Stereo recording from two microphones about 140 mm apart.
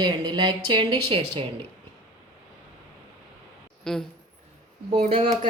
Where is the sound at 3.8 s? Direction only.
5° left (ahead or behind).